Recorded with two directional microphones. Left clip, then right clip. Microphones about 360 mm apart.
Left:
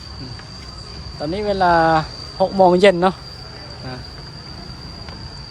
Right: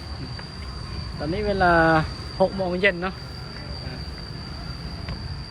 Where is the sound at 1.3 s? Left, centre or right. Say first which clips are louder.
Left 4 dB; centre.